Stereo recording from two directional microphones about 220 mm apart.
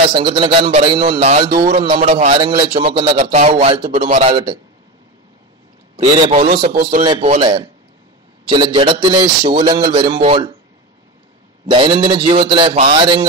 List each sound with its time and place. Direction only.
0.1 s a man's voice: 20° right (ahead or behind)
1.5 s speech: 40° right (ahead or behind)
1.8 s a man's voice: 25° right (ahead or behind)
5.9 s a man's voice: 30° right (ahead or behind)
6.7 s speech: 40° right (ahead or behind)
7.0 s a man's voice: 25° right (ahead or behind)
11.6 s a man's voice: 20° right (ahead or behind)